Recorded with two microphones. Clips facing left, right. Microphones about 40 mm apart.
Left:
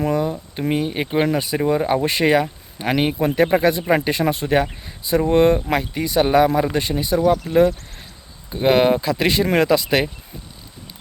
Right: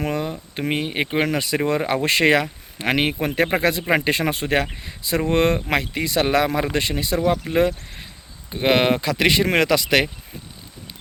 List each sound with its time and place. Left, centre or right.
0.0 s speech: right
7.3 s speech: right